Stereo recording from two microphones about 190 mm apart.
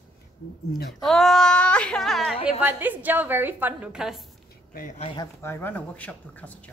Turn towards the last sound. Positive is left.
turn(degrees=10)  # may be behind; listen again after turning